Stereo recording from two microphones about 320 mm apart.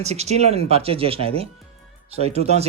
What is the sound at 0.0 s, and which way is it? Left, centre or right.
Speech, centre.